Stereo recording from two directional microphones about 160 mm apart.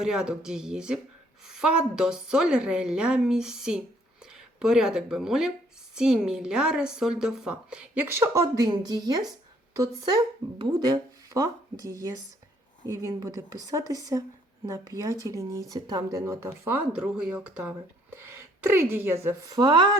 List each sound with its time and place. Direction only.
0.0 s a woman's voice: 5° right (ahead or behind); by 20.0 s 30° right (ahead or behind)